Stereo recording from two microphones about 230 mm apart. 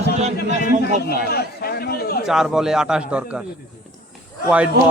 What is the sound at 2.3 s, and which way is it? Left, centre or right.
Speech, centre.